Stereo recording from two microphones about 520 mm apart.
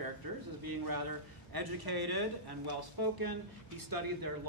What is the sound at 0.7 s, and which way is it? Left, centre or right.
Speech, right.